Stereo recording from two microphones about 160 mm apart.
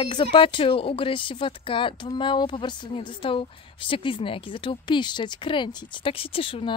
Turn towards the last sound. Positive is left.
turn(degrees=35)  # may be behind; listen again after turning